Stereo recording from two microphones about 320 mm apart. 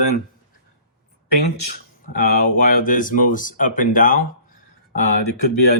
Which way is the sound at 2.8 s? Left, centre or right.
Left.